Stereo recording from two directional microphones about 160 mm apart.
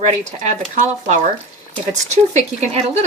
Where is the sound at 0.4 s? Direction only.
45° right (ahead or behind).